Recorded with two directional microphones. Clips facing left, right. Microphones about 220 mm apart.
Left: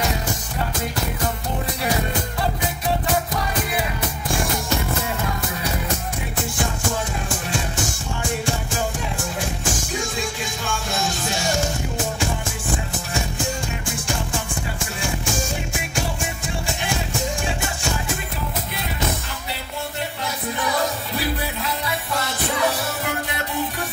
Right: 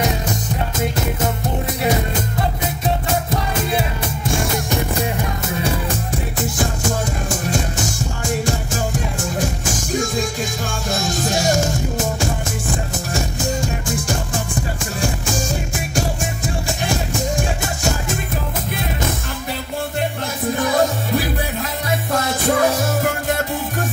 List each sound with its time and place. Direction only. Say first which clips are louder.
10.7 s music: right 3 dB; 40° right (ahead or behind)
20.5 s music: right 6 dB; 45° right (ahead or behind)